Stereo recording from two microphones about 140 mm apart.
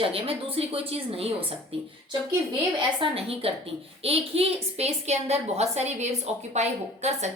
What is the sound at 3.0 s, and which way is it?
A woman's voice, 45° right (ahead or behind).